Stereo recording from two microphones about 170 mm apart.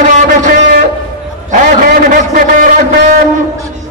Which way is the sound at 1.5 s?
50° right (ahead or behind).